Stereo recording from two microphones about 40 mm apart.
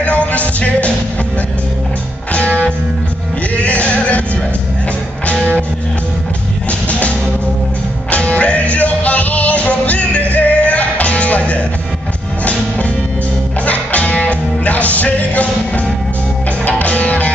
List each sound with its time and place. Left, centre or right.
0.0 s music: left
3.5 s music: left
6.9 s music: left
13.7 s music: left